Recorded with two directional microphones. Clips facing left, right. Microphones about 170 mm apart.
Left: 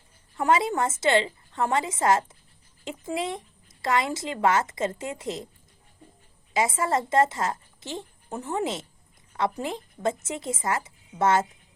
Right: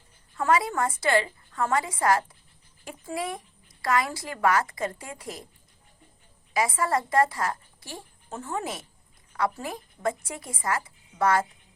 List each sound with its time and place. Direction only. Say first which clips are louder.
0.3 s a woman's voice: left 1 dB; 20° left (ahead or behind)
6.5 s a woman's voice: left 1 dB; 25° left (ahead or behind)